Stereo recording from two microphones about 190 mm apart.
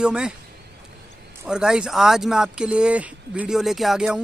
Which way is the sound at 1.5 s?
5° right (ahead or behind).